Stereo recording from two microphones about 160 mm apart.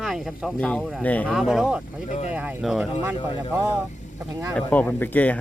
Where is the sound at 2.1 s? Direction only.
45° left (ahead or behind).